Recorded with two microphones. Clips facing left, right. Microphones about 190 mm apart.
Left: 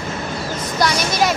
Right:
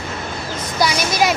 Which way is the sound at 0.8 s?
5° right (ahead or behind).